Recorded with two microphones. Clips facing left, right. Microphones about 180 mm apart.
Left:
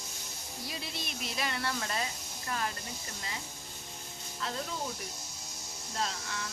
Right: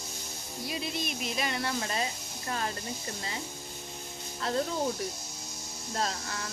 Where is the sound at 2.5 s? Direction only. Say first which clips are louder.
Right 2 dB; 30° right (ahead or behind).